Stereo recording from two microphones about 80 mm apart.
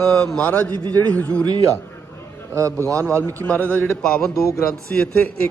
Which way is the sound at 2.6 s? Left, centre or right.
Right.